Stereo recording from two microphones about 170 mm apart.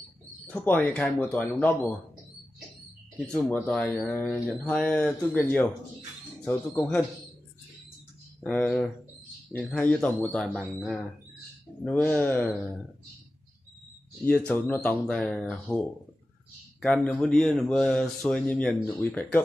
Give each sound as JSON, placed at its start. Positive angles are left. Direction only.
{"t": 0.5, "sound": "speech", "side_deg": 10}
{"t": 3.2, "sound": "speech", "side_deg": 5}
{"t": 6.8, "sound": "speech", "side_deg": 0}
{"t": 8.4, "sound": "speech", "side_deg": 5}
{"t": 14.2, "sound": "speech", "side_deg": 5}
{"t": 16.8, "sound": "speech", "side_deg": 5}